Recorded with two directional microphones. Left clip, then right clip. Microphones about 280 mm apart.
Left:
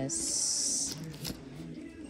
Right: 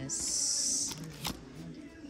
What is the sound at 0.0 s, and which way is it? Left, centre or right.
Music, centre.